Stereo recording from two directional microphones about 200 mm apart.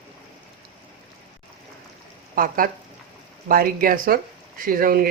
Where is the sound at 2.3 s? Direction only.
45° right (ahead or behind).